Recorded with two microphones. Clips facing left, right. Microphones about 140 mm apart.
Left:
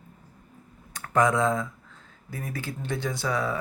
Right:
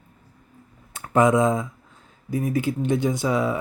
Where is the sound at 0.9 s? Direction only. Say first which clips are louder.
Right 5 dB; 20° right (ahead or behind).